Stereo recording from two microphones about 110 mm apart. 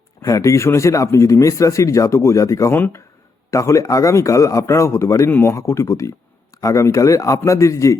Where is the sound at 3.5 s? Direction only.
30° left (ahead or behind).